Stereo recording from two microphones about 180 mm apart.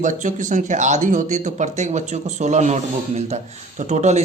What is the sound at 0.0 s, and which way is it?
Speech, 45° right (ahead or behind).